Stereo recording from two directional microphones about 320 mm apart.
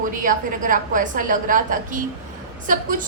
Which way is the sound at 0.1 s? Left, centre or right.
Right.